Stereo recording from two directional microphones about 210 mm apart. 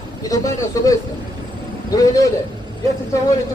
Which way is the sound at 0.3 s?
15° left (ahead or behind).